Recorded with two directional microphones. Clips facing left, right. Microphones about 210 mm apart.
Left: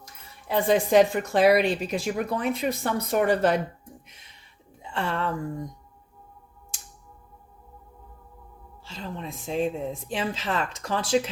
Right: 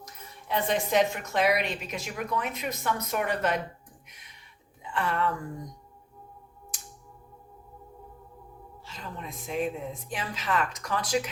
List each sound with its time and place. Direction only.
0.0 s speech: 35° left (ahead or behind)
4.8 s speech: 30° left (ahead or behind)
8.8 s speech: 30° left (ahead or behind)